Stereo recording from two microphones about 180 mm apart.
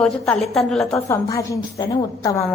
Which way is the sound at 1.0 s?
15° left (ahead or behind).